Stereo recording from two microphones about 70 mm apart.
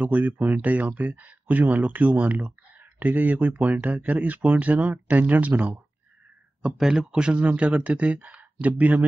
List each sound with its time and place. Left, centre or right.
0.0 s speech: right
6.8 s speech: centre; by 9.0 s right